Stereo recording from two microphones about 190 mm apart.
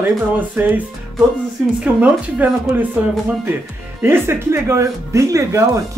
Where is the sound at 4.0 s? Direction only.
10° right (ahead or behind).